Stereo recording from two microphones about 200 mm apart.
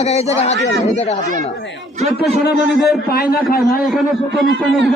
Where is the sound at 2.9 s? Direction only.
50° left (ahead or behind).